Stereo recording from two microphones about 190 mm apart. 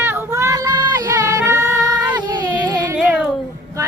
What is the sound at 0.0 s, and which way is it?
Yodeling, 15° right (ahead or behind).